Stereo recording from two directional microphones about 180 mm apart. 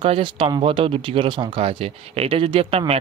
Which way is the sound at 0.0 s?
30° right (ahead or behind).